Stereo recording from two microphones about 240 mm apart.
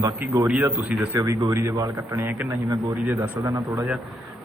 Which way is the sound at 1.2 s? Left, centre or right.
Centre.